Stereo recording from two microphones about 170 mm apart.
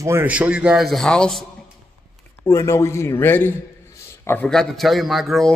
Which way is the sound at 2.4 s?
15° left (ahead or behind).